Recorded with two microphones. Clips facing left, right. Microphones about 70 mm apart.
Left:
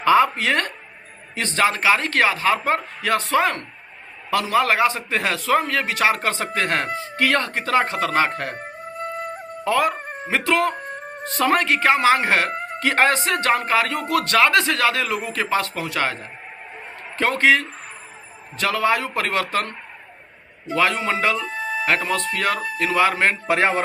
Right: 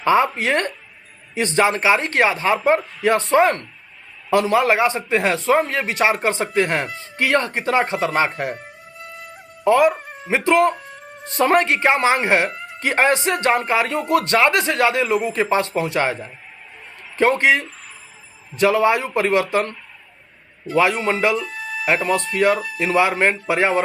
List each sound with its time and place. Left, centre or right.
0.0 s a man's voice: right
8.5 s music: left
9.6 s a man's voice: right
10.0 s a sound: left
10.2 s a man's voice: right
10.8 s music: left
11.3 s a man's voice: right
12.5 s music: left
12.8 s a man's voice: centre
20.7 s a man's voice: right
21.4 s music: left
21.8 s a man's voice: right